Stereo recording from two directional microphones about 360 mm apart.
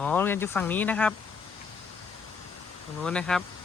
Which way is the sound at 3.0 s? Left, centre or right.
Centre.